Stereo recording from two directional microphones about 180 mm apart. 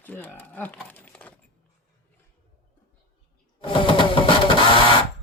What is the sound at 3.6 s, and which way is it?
Printer, 30° left (ahead or behind).